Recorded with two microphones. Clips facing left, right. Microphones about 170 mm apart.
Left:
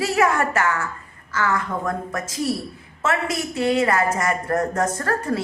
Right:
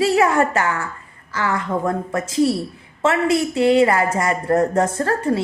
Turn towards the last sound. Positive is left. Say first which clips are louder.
# right 4 dB
turn(degrees=-25)  # may be behind; listen again after turning